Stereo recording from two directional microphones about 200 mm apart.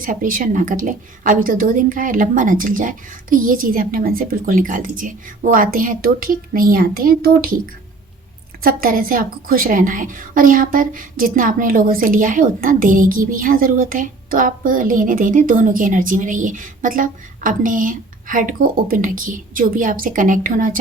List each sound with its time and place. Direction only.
0.0 s a woman's voice: 45° right (ahead or behind)
8.6 s a woman's voice: 45° right (ahead or behind)